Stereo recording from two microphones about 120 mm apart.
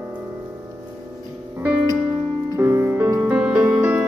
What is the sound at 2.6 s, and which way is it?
Music, 20° right (ahead or behind).